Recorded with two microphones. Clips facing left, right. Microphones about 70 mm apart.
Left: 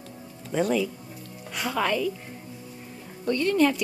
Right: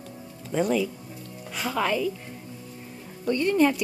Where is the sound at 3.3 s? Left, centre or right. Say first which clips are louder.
Right 1 dB; centre.